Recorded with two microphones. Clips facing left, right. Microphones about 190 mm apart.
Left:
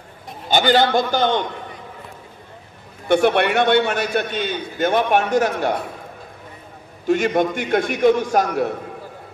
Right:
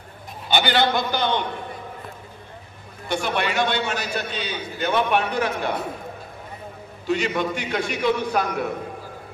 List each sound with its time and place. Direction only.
0.5 s a man's voice: 40° left (ahead or behind)
3.1 s a man's voice: 60° left (ahead or behind); by 5.7 s 45° left (ahead or behind)
7.1 s a man's voice: 50° left (ahead or behind)